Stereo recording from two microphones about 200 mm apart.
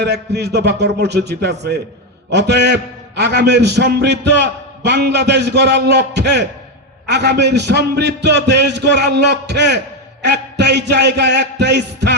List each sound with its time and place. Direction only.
0.0 s a man's voice: 60° right (ahead or behind)